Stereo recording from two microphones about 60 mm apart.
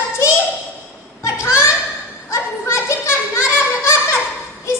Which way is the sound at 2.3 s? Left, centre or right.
Left.